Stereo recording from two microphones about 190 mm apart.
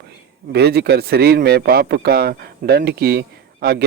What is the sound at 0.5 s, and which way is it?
Speech, 60° right (ahead or behind).